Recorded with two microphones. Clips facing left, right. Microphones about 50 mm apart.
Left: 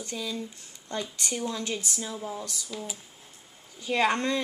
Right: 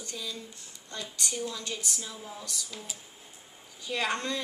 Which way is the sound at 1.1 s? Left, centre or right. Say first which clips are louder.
Right 1 dB; left.